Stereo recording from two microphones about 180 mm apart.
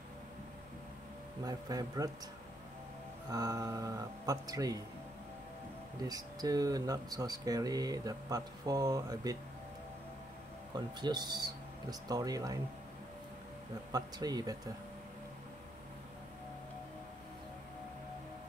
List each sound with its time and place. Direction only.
1.4 s speech: 20° right (ahead or behind)
3.3 s speech: 20° right (ahead or behind)
6.0 s speech: 20° right (ahead or behind)
10.7 s speech: 25° right (ahead or behind)
13.9 s speech: 20° right (ahead or behind)